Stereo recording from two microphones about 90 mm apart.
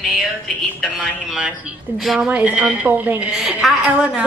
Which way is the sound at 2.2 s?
15° right (ahead or behind).